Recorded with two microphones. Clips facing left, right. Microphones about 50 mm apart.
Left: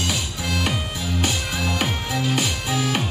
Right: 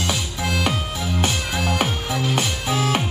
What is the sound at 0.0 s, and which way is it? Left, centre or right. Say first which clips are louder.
Music: right 2 dB; right.